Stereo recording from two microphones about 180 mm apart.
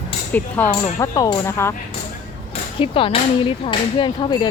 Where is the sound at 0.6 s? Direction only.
10° left (ahead or behind).